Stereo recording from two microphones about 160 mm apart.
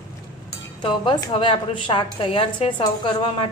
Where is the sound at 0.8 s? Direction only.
30° left (ahead or behind).